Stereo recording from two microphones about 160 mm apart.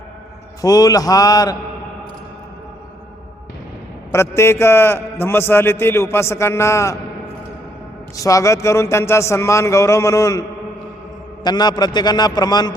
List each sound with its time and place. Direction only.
0.6 s speech: 25° left (ahead or behind)
4.1 s a man's voice: 15° left (ahead or behind)
8.1 s speech: 20° left (ahead or behind)
11.4 s speech: 25° left (ahead or behind)